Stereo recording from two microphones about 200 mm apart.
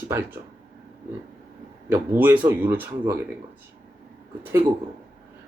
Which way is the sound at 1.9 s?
10° right (ahead or behind).